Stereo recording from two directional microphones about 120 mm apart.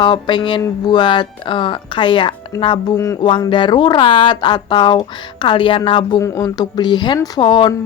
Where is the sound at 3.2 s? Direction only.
45° left (ahead or behind).